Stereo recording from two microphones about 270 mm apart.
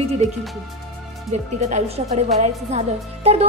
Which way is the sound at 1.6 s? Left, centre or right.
Right.